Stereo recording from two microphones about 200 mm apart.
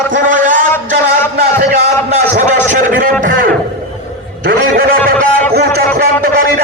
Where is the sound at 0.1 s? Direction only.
40° right (ahead or behind).